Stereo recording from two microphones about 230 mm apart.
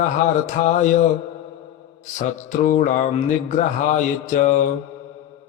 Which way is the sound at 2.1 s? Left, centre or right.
Left.